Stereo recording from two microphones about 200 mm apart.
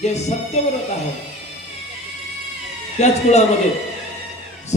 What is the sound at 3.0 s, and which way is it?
Speech, 35° left (ahead or behind).